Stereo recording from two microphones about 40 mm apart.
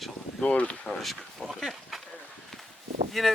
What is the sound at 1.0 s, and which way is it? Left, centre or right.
Speech, centre.